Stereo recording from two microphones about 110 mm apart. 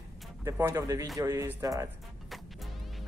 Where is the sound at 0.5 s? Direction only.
25° right (ahead or behind).